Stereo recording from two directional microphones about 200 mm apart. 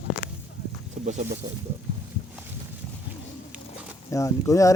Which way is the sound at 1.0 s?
40° right (ahead or behind).